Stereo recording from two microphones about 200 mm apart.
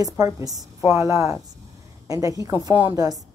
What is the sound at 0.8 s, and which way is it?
A woman's voice, 15° right (ahead or behind).